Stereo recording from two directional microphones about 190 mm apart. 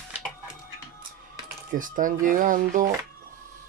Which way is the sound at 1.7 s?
45° right (ahead or behind).